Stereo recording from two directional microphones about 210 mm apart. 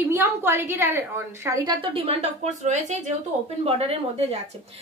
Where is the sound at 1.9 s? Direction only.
30° right (ahead or behind).